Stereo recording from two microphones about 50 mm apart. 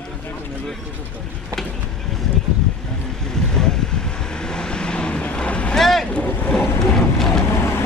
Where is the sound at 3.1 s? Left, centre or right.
Centre.